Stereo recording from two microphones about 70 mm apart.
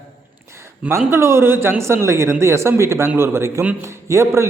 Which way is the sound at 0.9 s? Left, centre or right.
Right.